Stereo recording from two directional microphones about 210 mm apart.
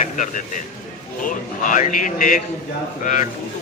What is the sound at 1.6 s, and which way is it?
A man's voice, 40° left (ahead or behind).